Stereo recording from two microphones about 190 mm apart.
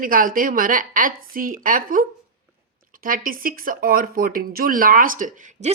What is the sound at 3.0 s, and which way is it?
Speech, 50° right (ahead or behind).